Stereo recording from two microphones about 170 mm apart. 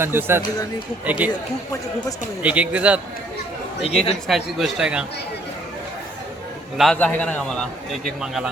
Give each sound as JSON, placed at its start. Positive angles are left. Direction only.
{"t": 0.0, "sound": "speech", "side_deg": -15}
{"t": 1.3, "sound": "speech", "side_deg": 20}
{"t": 2.4, "sound": "speech", "side_deg": -10}
{"t": 3.8, "sound": "speech", "side_deg": 35}
{"t": 4.3, "sound": "speech", "side_deg": 0}
{"t": 6.7, "sound": "a man's voice", "side_deg": 5}